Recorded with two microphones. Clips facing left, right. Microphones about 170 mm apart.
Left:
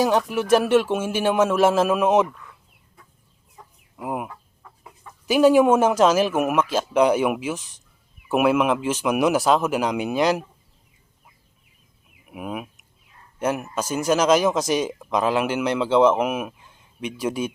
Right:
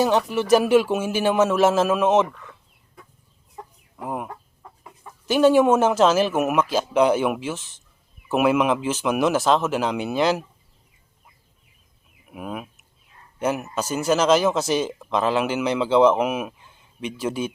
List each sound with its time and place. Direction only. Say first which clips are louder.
0.0 s speech: even; centre (ahead or behind)
3.9 s speech: left 1 dB; 10° left (ahead or behind)
12.3 s speech: left 1 dB; 5° left (ahead or behind)
13.8 s speech: even; 5° right (ahead or behind)